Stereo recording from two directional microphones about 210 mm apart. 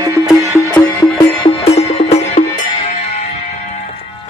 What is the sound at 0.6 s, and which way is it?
Music, 20° left (ahead or behind).